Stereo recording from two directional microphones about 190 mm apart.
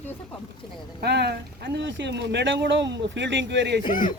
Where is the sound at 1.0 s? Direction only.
60° right (ahead or behind).